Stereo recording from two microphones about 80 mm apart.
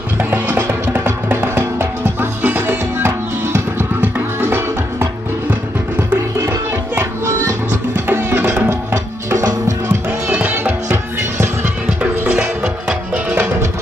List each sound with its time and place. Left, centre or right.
0.2 s music: right
8.9 s music: right
10.3 s music: right
10.9 s music: right
12.0 s music: centre